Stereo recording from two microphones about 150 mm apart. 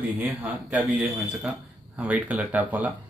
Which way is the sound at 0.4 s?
10° right (ahead or behind).